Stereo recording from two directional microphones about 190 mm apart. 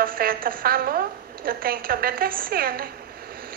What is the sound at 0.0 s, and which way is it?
A woman's voice, 50° right (ahead or behind).